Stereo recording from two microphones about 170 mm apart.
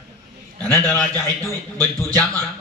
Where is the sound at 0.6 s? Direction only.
15° left (ahead or behind).